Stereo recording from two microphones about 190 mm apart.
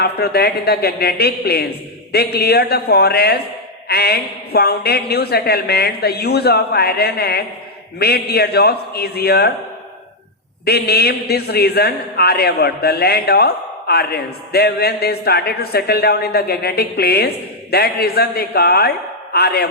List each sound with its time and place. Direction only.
0.0 s a man's voice: 55° left (ahead or behind)
10.7 s a man's voice: 55° left (ahead or behind)